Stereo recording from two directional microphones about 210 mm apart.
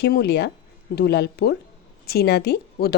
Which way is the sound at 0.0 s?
50° left (ahead or behind).